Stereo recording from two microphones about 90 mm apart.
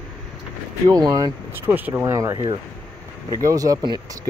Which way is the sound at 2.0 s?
35° right (ahead or behind).